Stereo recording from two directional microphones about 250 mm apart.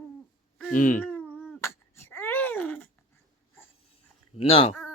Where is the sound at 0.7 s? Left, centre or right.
Left.